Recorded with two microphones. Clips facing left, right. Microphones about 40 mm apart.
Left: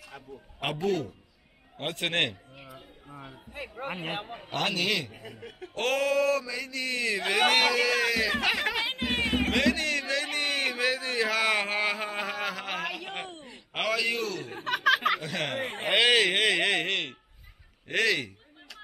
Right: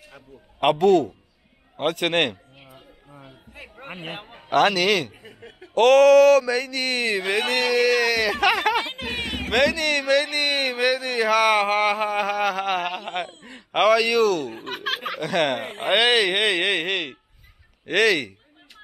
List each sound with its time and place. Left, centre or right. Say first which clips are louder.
0.6 s speech: right 12 dB; right
1.8 s speech: right 7 dB; right
3.8 s speech: left 4 dB; centre
4.5 s speech: right 10 dB; right
5.1 s speech: even; centre
5.8 s speech: right 13 dB; right
9.5 s a sound: right 5 dB; right
14.7 s a sound: left 6 dB; left
15.1 s speech: right 9 dB; right